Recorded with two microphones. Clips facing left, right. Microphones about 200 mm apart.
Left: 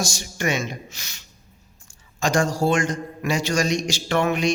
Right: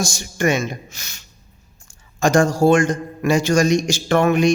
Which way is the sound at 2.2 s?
50° right (ahead or behind).